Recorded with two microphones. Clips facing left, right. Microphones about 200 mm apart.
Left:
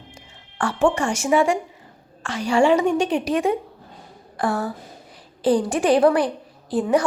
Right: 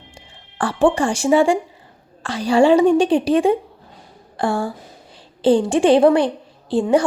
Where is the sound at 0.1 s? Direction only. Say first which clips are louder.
Right 1 dB; 30° right (ahead or behind).